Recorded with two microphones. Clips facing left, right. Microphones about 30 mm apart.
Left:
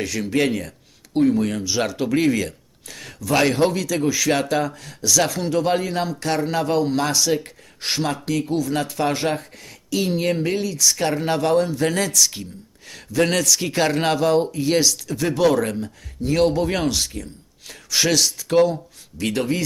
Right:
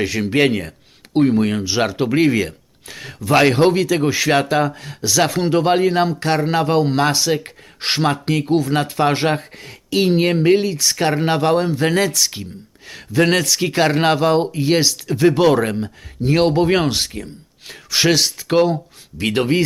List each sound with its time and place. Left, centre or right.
0.0 s speech: right